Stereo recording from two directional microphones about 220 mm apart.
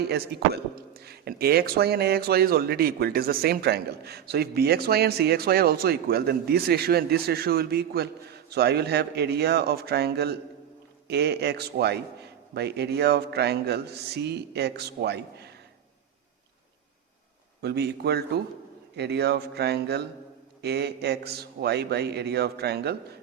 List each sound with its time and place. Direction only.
0.1 s a man's voice: 45° right (ahead or behind)
17.6 s a man's voice: 50° right (ahead or behind)